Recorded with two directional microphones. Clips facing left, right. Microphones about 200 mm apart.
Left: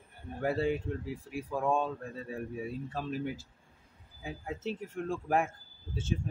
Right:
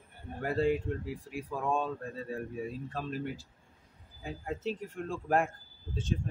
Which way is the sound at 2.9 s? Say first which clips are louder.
Left 1 dB; centre (ahead or behind).